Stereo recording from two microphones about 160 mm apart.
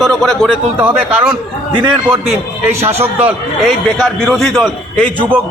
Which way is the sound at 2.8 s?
40° right (ahead or behind).